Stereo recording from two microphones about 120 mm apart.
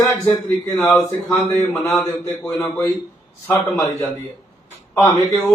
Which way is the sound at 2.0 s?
25° left (ahead or behind).